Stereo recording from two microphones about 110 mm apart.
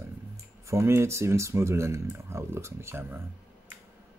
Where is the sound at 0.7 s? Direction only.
25° right (ahead or behind).